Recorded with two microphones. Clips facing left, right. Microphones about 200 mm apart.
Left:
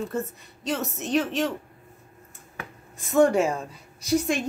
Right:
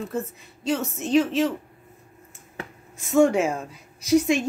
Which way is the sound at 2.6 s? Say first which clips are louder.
Right 3 dB; 30° right (ahead or behind).